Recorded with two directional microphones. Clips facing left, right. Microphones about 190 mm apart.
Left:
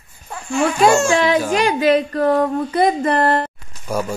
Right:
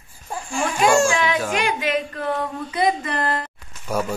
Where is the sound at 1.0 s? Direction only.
35° left (ahead or behind); by 3.5 s 50° left (ahead or behind).